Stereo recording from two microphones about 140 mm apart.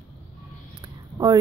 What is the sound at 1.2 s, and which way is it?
Speech, 25° right (ahead or behind).